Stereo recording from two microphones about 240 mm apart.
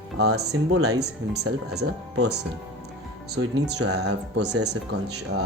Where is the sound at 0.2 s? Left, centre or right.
Right.